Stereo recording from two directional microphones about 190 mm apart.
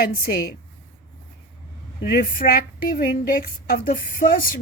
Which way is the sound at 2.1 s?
50° left (ahead or behind).